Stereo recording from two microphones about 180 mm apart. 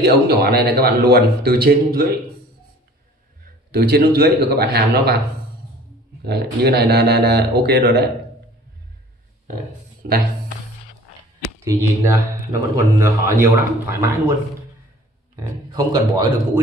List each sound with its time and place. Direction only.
0.0 s a man's voice: 60° right (ahead or behind)
3.7 s a man's voice: 60° right (ahead or behind)
6.2 s a man's voice: 65° right (ahead or behind)
11.6 s speech: 15° right (ahead or behind)
15.3 s speech: 20° right (ahead or behind)